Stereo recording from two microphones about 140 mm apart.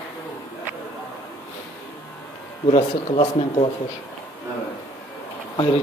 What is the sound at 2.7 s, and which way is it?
Speech, 50° left (ahead or behind).